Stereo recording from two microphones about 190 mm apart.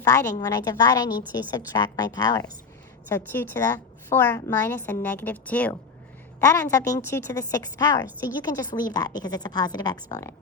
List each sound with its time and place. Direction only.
0.0 s a woman's voice: 15° left (ahead or behind)